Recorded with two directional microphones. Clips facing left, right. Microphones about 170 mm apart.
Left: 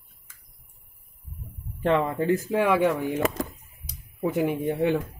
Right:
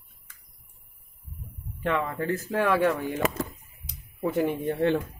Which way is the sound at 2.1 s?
15° left (ahead or behind).